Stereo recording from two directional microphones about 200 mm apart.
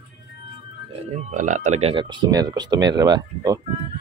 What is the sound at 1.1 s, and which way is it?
Speech, 40° right (ahead or behind).